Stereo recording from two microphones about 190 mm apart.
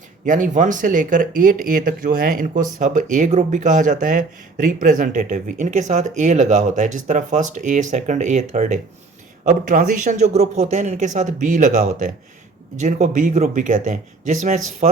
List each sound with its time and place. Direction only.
0.3 s speech: 45° right (ahead or behind)